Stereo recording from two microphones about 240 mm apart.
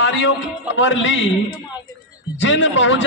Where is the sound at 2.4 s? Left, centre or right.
Left.